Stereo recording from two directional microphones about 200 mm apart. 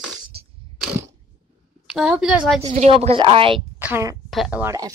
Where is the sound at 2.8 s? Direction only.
30° right (ahead or behind).